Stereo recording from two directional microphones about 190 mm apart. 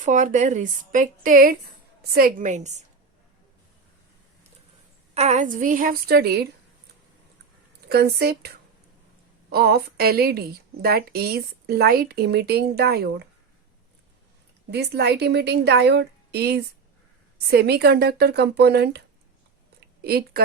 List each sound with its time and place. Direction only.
0.0 s a woman's voice: 40° right (ahead or behind)
5.1 s a woman's voice: 35° right (ahead or behind); by 6.5 s 55° right (ahead or behind)
7.9 s speech: 55° right (ahead or behind)
14.7 s a woman's voice: 60° right (ahead or behind)